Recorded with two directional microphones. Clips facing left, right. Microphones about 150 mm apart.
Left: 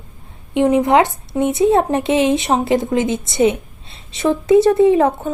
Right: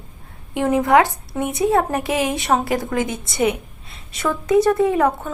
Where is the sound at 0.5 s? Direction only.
20° left (ahead or behind).